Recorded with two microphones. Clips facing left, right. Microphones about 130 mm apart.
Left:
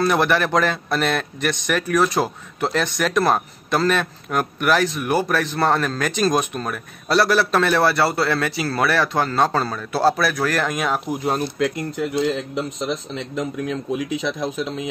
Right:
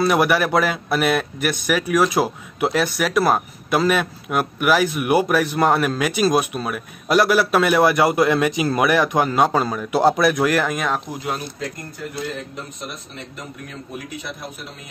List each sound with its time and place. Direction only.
0.0 s a man's voice: 10° right (ahead or behind)
11.5 s speech: 80° left